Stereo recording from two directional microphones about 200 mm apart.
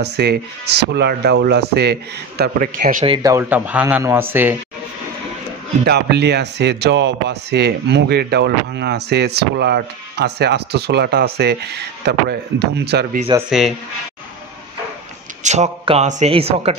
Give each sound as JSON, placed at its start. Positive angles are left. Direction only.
{"t": 0.0, "sound": "speech", "side_deg": -55}
{"t": 3.1, "sound": "speech", "side_deg": -20}
{"t": 5.9, "sound": "speech", "side_deg": -55}
{"t": 13.5, "sound": "speech", "side_deg": 0}
{"t": 15.4, "sound": "a man's voice", "side_deg": -35}